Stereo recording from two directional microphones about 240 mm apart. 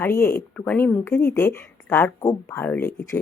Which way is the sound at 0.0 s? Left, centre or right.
Centre.